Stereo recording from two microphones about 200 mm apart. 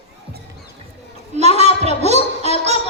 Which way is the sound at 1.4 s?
35° right (ahead or behind).